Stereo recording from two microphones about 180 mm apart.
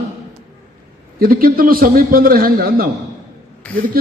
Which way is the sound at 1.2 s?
55° right (ahead or behind).